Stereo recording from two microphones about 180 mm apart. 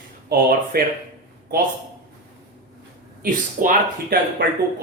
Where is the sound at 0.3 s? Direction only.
60° right (ahead or behind).